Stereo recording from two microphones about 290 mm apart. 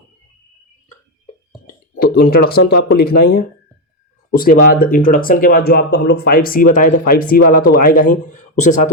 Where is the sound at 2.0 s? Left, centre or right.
Left.